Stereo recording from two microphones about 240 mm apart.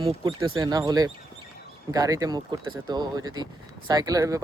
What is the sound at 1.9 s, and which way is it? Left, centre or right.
Speech, centre.